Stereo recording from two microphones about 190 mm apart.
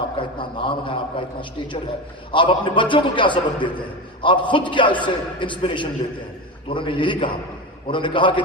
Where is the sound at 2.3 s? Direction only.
25° left (ahead or behind).